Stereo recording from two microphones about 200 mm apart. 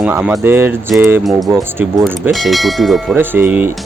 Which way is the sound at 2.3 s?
Centre (ahead or behind).